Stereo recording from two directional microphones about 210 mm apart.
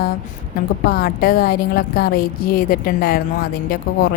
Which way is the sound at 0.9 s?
45° left (ahead or behind).